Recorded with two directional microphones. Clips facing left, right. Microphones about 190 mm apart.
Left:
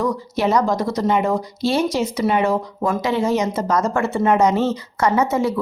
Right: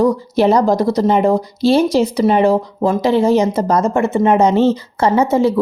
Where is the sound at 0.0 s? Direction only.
35° right (ahead or behind).